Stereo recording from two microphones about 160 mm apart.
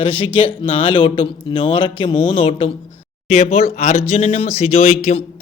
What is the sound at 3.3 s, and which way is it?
A man's voice, 45° left (ahead or behind).